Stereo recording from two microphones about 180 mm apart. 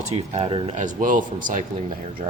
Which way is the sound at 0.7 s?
45° right (ahead or behind).